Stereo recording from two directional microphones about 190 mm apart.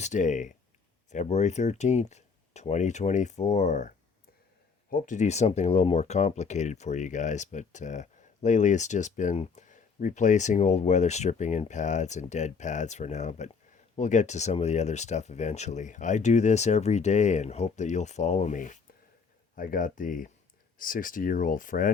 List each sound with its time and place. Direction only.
0.0 s speech: 40° left (ahead or behind)